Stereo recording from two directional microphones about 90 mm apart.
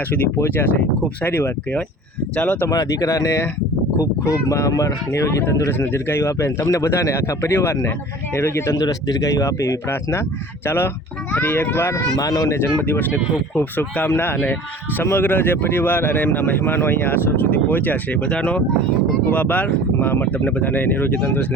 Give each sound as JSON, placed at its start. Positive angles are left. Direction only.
{"t": 0.3, "sound": "speech", "side_deg": 25}
{"t": 2.6, "sound": "speech", "side_deg": 35}
{"t": 12.1, "sound": "speech", "side_deg": 45}
{"t": 12.5, "sound": "speech", "side_deg": 25}